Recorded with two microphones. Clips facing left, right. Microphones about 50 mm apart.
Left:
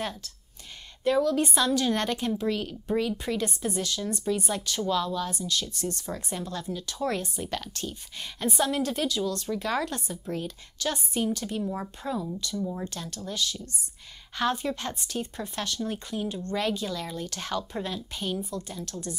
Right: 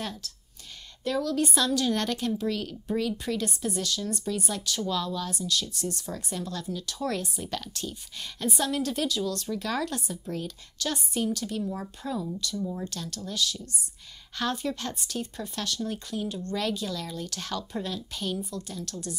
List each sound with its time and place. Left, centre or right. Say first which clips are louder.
0.0 s speech: left 2 dB; centre
6.0 s speech: left 1 dB; centre
11.2 s speech: even; centre